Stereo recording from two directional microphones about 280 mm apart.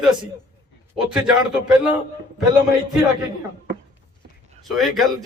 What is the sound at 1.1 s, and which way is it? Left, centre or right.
Speech, centre.